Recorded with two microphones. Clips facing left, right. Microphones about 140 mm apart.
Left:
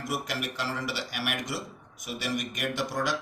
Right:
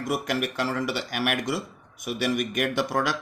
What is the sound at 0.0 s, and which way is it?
Speech, 50° right (ahead or behind).